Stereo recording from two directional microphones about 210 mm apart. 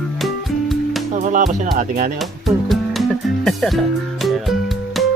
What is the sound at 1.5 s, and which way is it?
Speech, 35° right (ahead or behind).